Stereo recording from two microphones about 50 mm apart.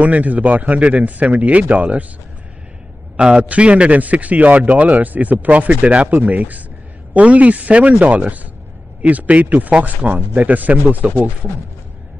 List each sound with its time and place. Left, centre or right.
0.0 s speech: right
3.2 s a man's voice: centre